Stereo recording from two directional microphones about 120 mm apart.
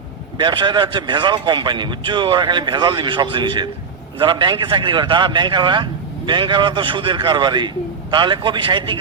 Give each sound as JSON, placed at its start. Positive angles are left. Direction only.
{"t": 0.3, "sound": "a man's voice", "side_deg": -40}